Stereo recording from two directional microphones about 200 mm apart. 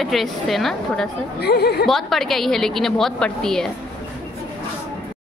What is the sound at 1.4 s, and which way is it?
Speech, 55° left (ahead or behind).